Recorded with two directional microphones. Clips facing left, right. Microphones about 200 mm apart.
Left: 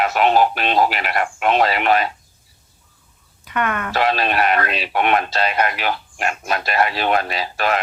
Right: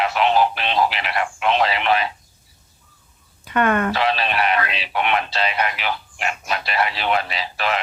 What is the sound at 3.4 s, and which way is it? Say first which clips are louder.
Speech: right 4 dB; 30° right (ahead or behind).